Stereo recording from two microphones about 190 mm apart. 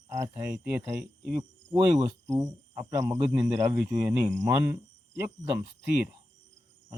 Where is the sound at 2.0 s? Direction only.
20° right (ahead or behind).